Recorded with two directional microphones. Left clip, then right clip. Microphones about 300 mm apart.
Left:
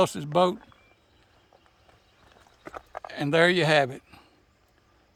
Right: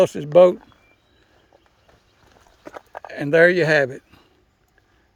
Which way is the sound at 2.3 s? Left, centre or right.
Right.